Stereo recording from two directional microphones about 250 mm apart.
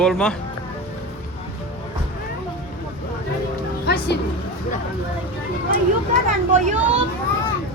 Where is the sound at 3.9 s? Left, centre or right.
Left.